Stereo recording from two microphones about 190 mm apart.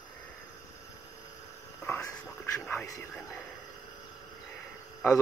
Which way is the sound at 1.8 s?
10° left (ahead or behind).